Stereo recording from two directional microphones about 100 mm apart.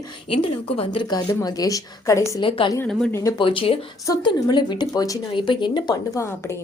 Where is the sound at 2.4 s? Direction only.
60° left (ahead or behind).